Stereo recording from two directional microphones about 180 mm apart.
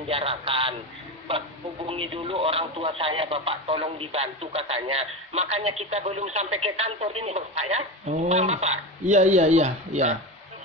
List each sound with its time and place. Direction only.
0.1 s speech: 30° right (ahead or behind)
1.9 s speech: 30° right (ahead or behind)